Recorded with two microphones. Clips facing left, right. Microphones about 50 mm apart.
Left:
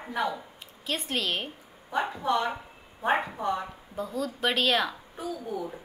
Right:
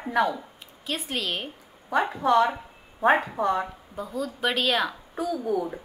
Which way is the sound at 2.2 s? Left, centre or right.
Right.